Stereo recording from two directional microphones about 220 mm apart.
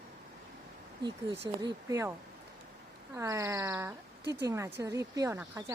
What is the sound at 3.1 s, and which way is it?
Speech, 15° right (ahead or behind).